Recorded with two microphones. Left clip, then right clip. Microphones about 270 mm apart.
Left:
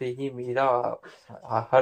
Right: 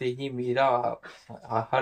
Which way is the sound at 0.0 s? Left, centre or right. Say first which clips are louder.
Right 1 dB; centre.